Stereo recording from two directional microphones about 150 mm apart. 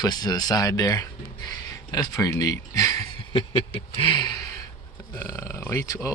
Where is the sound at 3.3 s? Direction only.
35° left (ahead or behind).